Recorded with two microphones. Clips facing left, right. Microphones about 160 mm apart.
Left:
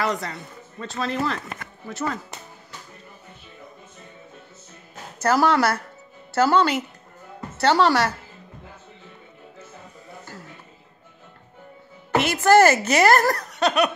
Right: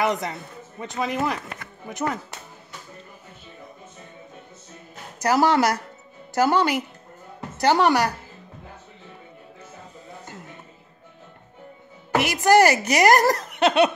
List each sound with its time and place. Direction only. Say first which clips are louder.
0.0 s a woman's voice: right 2 dB; 20° right (ahead or behind)
5.2 s a woman's voice: even; 15° right (ahead or behind)
12.2 s speech: left 1 dB; 15° right (ahead or behind)